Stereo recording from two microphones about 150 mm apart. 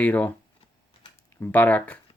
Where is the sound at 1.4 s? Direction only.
10° left (ahead or behind).